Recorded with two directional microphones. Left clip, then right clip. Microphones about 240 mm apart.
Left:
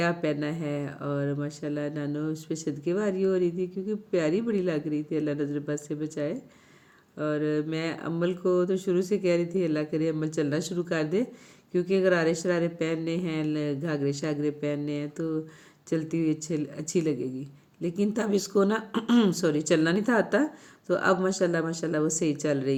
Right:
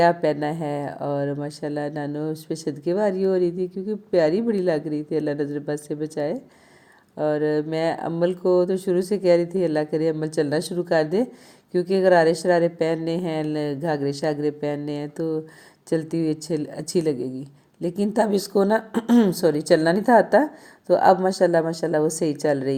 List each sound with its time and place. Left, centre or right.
0.2 s speech: centre